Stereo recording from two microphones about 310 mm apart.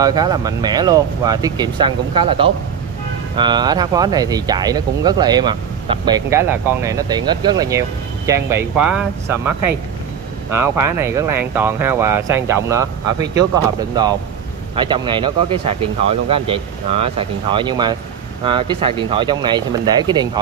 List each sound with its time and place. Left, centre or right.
0.0 s speech: centre
10.5 s speech: centre
14.8 s speech: centre